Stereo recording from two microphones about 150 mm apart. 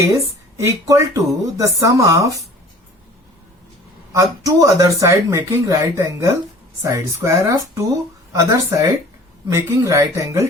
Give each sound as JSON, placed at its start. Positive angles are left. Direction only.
{"t": 0.0, "sound": "speech", "side_deg": -20}
{"t": 4.1, "sound": "speech", "side_deg": -20}